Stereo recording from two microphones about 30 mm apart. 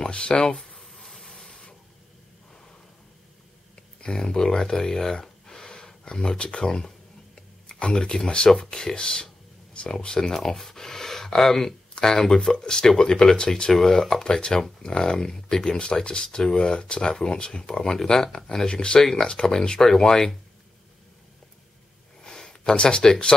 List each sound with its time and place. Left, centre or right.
0.0 s speech: left
0.6 s a sound: centre
1.0 s steam: centre
1.3 s printer: left
4.0 s a sound: left
6.3 s speech: left; by 11.7 s centre
12.0 s speech: left
19.2 s speech: left
22.2 s a sound: left
22.6 s speech: left